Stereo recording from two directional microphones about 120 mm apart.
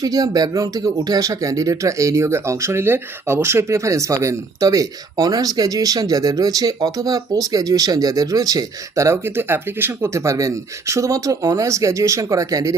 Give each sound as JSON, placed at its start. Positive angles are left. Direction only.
{"t": 0.0, "sound": "speech", "side_deg": -30}